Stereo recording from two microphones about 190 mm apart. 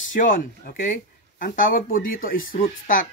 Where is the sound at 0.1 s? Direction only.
45° left (ahead or behind).